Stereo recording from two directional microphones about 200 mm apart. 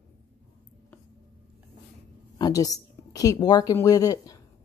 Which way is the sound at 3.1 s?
15° left (ahead or behind).